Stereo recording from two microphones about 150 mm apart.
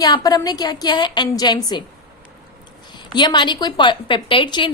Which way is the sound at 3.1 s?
30° left (ahead or behind).